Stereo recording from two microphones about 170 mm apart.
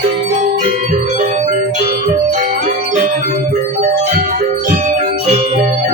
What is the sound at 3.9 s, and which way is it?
Music, 60° right (ahead or behind).